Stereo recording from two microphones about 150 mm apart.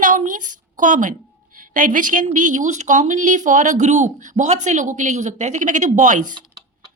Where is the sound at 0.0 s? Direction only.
60° right (ahead or behind).